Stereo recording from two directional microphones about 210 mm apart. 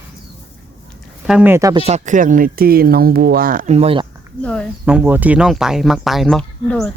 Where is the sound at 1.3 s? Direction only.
10° right (ahead or behind).